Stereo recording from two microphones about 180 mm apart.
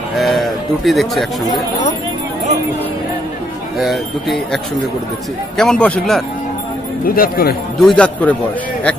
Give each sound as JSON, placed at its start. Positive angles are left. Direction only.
{"t": 0.2, "sound": "speech", "side_deg": 0}
{"t": 3.7, "sound": "speech", "side_deg": 0}
{"t": 5.6, "sound": "speech", "side_deg": 5}
{"t": 7.1, "sound": "speech", "side_deg": 55}
{"t": 7.8, "sound": "speech", "side_deg": 5}